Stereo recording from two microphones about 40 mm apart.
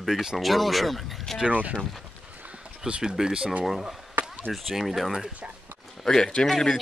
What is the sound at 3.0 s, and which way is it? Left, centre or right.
Speech, centre.